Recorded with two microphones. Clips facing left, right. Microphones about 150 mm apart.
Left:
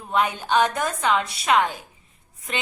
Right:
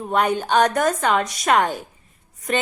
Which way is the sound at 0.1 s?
40° right (ahead or behind).